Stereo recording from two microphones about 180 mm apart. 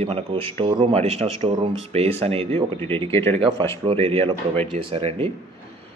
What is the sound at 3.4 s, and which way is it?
Speech, 30° right (ahead or behind).